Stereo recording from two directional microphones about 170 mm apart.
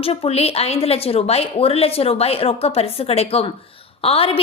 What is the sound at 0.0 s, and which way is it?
A woman's voice, 35° left (ahead or behind).